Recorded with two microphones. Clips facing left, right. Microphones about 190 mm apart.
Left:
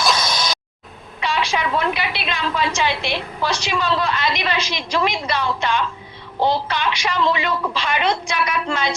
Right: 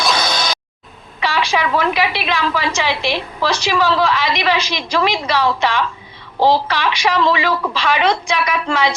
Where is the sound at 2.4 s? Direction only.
85° right.